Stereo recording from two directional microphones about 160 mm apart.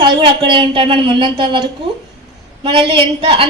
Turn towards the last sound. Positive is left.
turn(degrees=-35)  # may be behind; listen again after turning